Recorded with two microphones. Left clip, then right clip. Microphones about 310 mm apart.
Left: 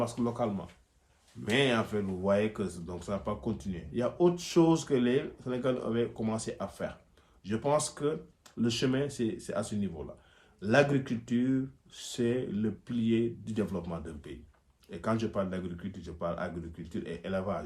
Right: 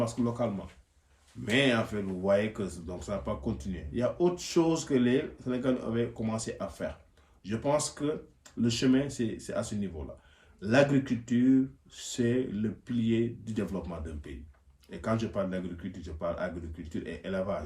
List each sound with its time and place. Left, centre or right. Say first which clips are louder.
0.0 s speech: right 1 dB; centre